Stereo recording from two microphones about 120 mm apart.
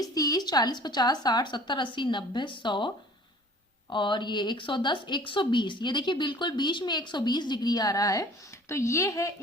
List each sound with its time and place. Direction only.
0.0 s speech: 30° left (ahead or behind)